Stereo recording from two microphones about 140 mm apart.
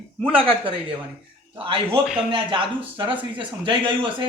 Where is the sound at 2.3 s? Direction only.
40° right (ahead or behind).